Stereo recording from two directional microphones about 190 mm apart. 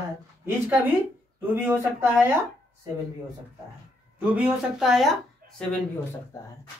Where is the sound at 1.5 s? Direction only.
10° right (ahead or behind).